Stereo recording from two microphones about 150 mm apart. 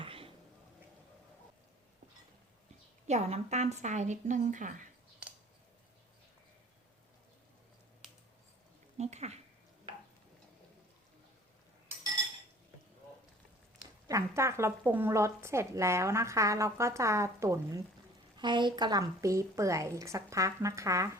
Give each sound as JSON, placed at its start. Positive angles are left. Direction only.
{"t": 0.0, "sound": "a sound", "side_deg": -40}
{"t": 3.1, "sound": "a woman's voice", "side_deg": -45}
{"t": 9.0, "sound": "speech", "side_deg": -45}
{"t": 13.7, "sound": "a woman's voice", "side_deg": -20}
{"t": 18.3, "sound": "a woman's voice", "side_deg": -30}